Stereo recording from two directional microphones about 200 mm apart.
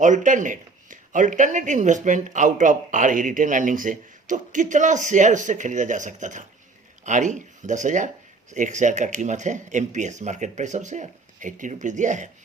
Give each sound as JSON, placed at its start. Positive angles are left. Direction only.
{"t": 0.0, "sound": "speech", "side_deg": -40}